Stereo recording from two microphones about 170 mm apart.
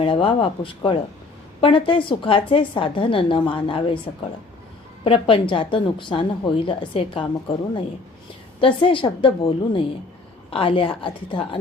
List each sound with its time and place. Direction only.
0.0 s a woman's voice: 30° left (ahead or behind)